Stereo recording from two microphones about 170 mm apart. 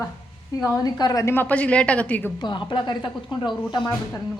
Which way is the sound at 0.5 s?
20° left (ahead or behind).